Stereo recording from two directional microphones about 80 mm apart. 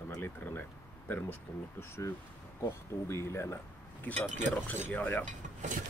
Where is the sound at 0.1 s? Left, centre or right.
Left.